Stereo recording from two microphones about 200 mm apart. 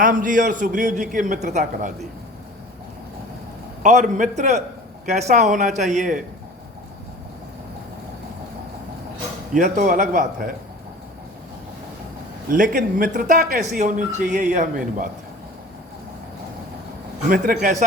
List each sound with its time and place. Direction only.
0.0 s speech: 40° right (ahead or behind)
3.8 s speech: 40° right (ahead or behind)
9.6 s speech: 40° right (ahead or behind)
12.5 s speech: 40° right (ahead or behind)
17.2 s speech: 45° right (ahead or behind)